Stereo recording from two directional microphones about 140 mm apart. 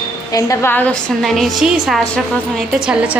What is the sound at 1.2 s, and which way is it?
A woman's voice, centre (ahead or behind).